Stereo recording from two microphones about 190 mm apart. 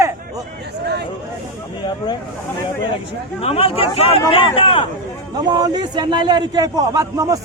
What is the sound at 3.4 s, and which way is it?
Speech, 30° left (ahead or behind).